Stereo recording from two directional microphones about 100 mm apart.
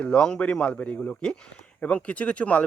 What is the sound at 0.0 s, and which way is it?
Speech, 10° left (ahead or behind).